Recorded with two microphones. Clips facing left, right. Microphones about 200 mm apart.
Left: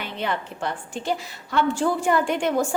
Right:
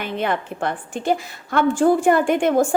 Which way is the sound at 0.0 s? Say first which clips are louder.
Right 5 dB; 55° right (ahead or behind).